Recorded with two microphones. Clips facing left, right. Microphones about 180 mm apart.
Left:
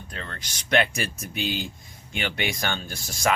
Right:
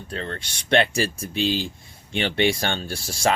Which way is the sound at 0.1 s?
30° right (ahead or behind).